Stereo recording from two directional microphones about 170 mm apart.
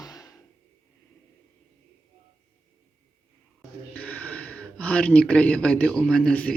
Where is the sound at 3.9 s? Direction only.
10° left (ahead or behind).